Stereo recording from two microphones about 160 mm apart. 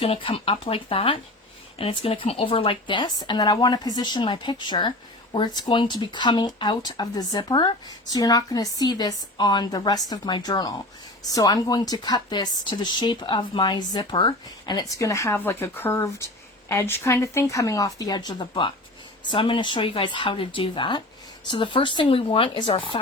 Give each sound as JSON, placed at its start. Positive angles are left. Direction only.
{"t": 0.0, "sound": "speech", "side_deg": 35}